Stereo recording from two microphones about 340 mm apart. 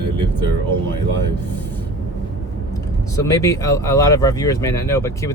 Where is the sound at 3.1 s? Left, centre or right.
Centre.